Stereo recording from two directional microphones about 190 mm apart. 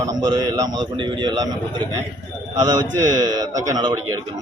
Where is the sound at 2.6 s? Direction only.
20° right (ahead or behind).